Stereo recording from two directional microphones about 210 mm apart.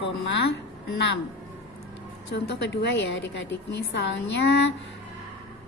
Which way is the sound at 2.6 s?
60° left (ahead or behind).